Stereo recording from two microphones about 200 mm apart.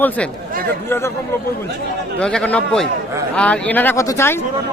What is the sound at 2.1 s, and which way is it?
Speech, 5° left (ahead or behind).